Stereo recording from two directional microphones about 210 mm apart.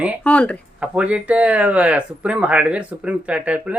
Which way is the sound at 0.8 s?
5° right (ahead or behind).